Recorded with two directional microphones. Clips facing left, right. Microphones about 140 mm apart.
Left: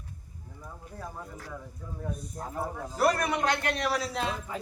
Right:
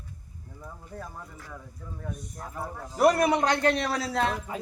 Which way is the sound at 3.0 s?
20° right (ahead or behind).